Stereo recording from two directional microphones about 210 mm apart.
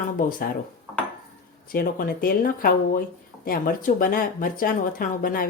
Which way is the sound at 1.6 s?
45° left (ahead or behind).